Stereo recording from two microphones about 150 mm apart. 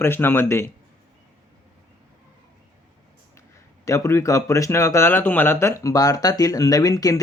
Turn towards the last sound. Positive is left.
turn(degrees=25)  # may be behind; listen again after turning